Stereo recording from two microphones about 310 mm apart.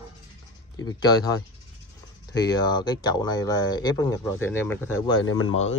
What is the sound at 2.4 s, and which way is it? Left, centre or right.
Speech, centre.